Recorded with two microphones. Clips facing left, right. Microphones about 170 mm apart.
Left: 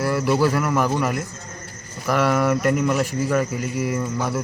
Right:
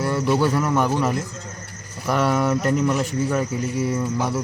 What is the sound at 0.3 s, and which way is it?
Speech, centre (ahead or behind).